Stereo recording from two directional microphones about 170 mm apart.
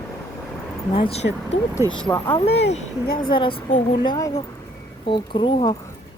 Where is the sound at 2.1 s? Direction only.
15° left (ahead or behind).